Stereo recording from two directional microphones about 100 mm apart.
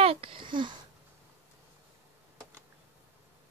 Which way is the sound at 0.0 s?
70° right (ahead or behind).